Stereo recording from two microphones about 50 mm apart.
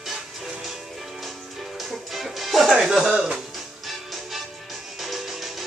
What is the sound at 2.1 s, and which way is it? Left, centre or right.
Music, centre.